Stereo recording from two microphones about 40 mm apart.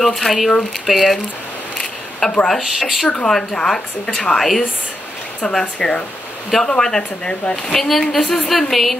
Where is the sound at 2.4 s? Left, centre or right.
Centre.